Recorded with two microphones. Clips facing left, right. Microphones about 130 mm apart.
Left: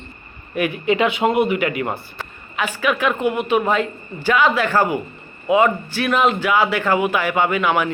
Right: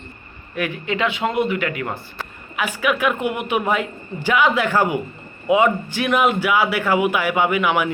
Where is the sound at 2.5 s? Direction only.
10° right (ahead or behind).